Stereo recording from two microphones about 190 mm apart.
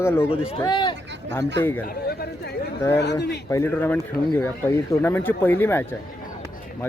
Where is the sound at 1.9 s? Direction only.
55° left (ahead or behind).